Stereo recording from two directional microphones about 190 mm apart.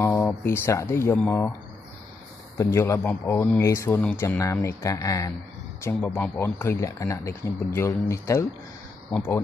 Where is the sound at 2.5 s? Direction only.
15° left (ahead or behind).